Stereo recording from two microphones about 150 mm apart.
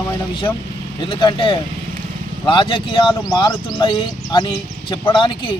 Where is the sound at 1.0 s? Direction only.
35° left (ahead or behind).